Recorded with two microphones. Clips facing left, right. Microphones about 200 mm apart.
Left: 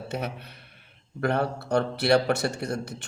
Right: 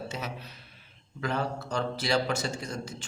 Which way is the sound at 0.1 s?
60° left (ahead or behind).